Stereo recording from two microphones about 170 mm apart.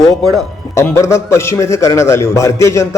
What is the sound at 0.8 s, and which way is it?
A man's voice, 15° left (ahead or behind).